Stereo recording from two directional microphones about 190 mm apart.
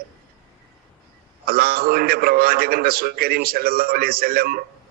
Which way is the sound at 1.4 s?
50° right (ahead or behind).